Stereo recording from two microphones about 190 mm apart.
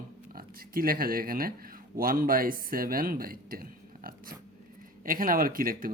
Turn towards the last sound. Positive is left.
turn(degrees=-50)  # may be behind; listen again after turning